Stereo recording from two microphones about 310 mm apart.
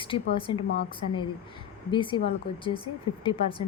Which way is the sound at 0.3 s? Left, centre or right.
Centre.